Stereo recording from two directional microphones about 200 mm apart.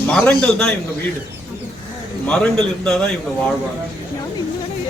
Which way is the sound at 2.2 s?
5° left (ahead or behind).